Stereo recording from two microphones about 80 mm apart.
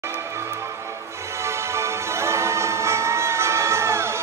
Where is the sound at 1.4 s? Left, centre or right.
Right.